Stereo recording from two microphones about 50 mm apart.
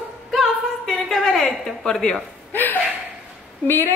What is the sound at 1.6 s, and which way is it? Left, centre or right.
Speech, centre.